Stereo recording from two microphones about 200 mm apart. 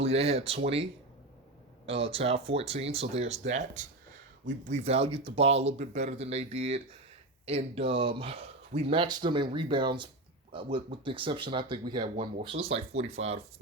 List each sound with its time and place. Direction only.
0.0 s speech: 30° right (ahead or behind)
1.9 s speech: 30° right (ahead or behind)